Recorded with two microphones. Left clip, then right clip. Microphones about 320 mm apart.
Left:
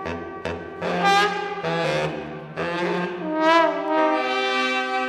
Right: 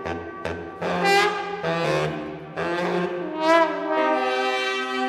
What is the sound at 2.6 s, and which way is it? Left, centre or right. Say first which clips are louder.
Brass instrument: even; right.